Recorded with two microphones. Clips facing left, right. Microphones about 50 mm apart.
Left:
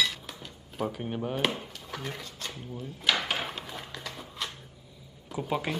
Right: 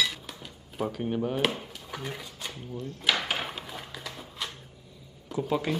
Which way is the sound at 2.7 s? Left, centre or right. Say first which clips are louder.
Even; centre.